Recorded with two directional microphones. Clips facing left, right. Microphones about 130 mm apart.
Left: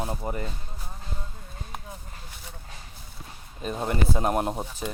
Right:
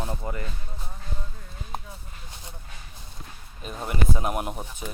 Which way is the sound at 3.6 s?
40° left (ahead or behind).